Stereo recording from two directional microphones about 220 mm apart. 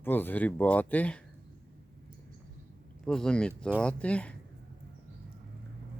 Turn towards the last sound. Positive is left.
turn(degrees=5)  # may be behind; listen again after turning